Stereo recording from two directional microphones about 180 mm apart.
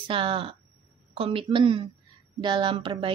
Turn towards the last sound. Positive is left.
turn(degrees=-30)  # may be behind; listen again after turning